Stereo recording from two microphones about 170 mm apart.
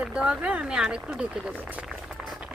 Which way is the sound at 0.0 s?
5° right (ahead or behind).